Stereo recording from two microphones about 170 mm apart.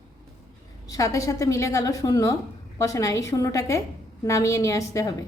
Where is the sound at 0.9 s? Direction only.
20° left (ahead or behind).